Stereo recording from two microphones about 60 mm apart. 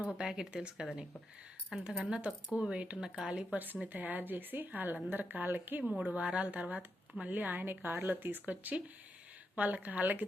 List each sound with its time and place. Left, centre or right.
0.1 s speech: centre
3.5 s speech: right